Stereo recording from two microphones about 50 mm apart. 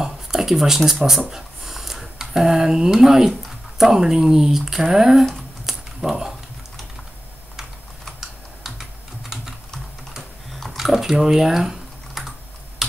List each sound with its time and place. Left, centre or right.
0.0 s speech: centre
5.7 s a sound: centre
8.2 s typing: centre
10.8 s typing: centre